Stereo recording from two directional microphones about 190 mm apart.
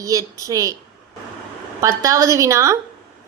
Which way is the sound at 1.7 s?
15° right (ahead or behind).